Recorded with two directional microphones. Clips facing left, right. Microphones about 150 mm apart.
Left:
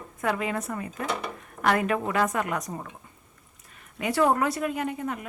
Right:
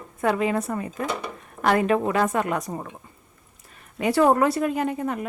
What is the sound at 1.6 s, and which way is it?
A woman's voice, 30° right (ahead or behind).